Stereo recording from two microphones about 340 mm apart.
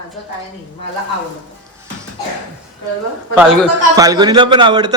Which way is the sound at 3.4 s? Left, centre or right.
Centre.